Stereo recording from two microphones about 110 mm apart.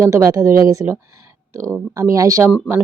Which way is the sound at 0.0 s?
30° right (ahead or behind).